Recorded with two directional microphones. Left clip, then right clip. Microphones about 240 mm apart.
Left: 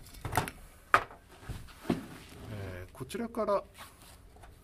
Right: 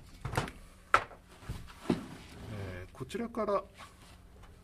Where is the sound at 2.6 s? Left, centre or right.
Centre.